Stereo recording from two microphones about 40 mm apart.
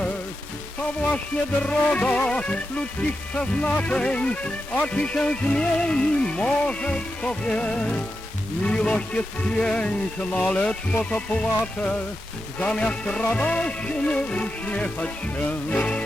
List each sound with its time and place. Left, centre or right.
1.6 s music: left